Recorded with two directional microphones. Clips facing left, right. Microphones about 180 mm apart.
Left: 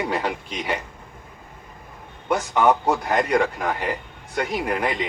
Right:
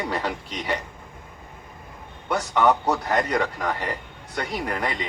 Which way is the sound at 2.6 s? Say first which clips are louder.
Left 1 dB; 10° left (ahead or behind).